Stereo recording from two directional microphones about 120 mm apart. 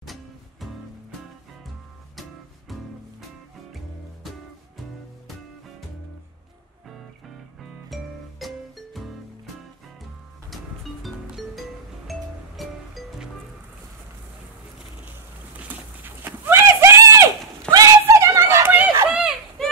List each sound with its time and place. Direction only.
0.0 s music: centre (ahead or behind)
2.7 s music: centre (ahead or behind)
7.9 s music: centre (ahead or behind)
10.5 s music: centre (ahead or behind)
16.0 s horse: 15° right (ahead or behind)
19.0 s a sound: 10° right (ahead or behind)